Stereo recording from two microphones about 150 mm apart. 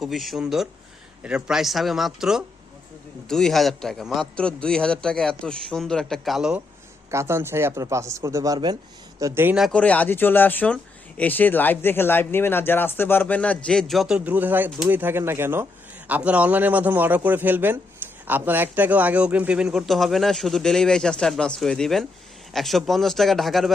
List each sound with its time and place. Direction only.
0.0 s speech: centre (ahead or behind)
7.1 s speech: 20° right (ahead or behind)
9.6 s speech: 5° left (ahead or behind)
14.3 s a man's voice: 10° right (ahead or behind)